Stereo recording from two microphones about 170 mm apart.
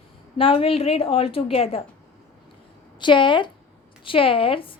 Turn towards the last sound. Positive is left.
turn(degrees=30)  # may be behind; listen again after turning